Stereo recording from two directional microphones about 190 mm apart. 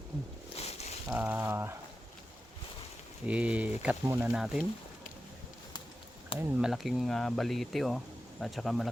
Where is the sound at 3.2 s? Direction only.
5° right (ahead or behind).